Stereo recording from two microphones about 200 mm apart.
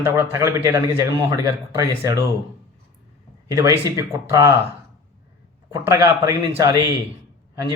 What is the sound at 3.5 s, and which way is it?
Speech, 15° right (ahead or behind).